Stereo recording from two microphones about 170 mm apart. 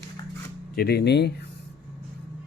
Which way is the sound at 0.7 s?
70° left (ahead or behind).